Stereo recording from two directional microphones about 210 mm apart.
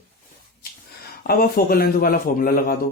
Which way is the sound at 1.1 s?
45° left (ahead or behind).